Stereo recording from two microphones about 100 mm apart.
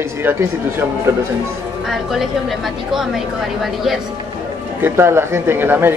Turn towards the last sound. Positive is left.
turn(degrees=-20)  # may be behind; listen again after turning